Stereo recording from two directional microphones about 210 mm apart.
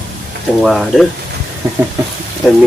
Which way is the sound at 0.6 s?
Centre (ahead or behind).